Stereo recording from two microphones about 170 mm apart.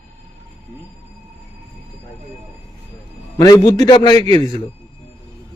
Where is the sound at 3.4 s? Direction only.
20° left (ahead or behind).